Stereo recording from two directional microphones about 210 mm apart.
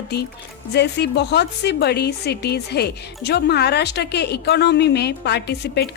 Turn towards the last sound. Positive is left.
turn(degrees=50)  # may be behind; listen again after turning